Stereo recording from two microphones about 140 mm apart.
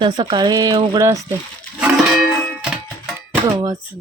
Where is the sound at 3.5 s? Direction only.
30° right (ahead or behind).